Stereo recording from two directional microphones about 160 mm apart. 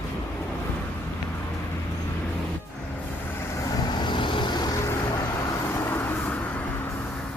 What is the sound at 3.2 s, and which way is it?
Vehicle, 15° left (ahead or behind).